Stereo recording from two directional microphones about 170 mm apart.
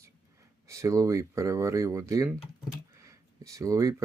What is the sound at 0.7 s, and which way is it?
Speech, 20° right (ahead or behind).